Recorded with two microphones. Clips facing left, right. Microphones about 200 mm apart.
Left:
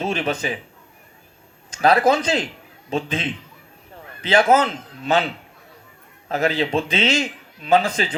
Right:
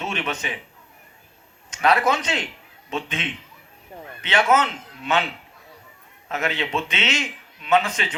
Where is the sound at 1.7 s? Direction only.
30° left (ahead or behind).